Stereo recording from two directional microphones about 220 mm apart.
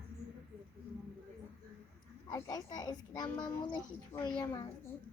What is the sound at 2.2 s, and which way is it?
A child's voice, 15° left (ahead or behind).